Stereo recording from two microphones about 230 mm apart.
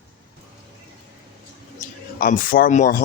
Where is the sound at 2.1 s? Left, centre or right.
Left.